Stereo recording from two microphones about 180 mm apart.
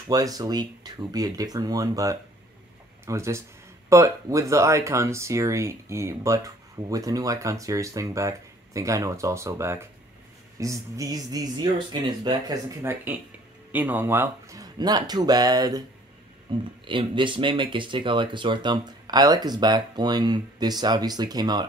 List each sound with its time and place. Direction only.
0.1 s speech: 20° right (ahead or behind)